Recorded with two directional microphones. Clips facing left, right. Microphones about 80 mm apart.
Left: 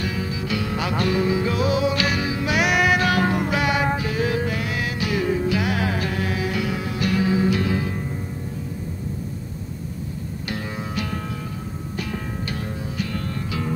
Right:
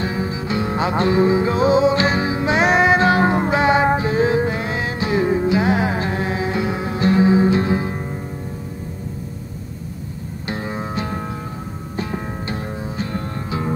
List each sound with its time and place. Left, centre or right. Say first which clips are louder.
0.0 s music: right 4 dB; right
10.4 s music: right 5 dB; right